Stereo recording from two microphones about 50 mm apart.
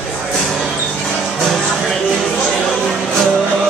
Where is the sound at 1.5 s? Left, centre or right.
Centre.